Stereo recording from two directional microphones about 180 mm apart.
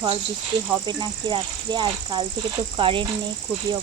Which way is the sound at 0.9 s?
25° right (ahead or behind).